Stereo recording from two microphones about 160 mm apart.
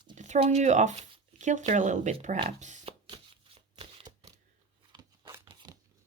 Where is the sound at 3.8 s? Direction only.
30° right (ahead or behind).